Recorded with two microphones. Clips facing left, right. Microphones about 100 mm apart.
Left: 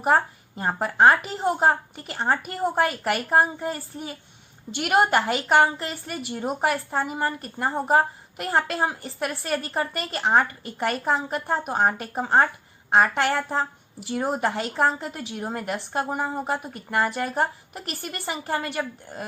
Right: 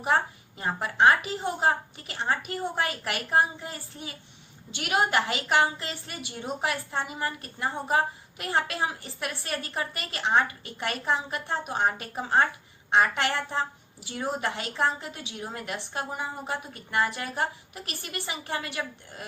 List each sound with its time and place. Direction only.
0.0 s a woman's voice: 40° left (ahead or behind)